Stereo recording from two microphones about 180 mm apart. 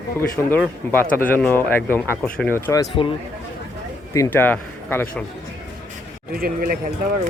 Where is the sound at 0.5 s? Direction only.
10° left (ahead or behind).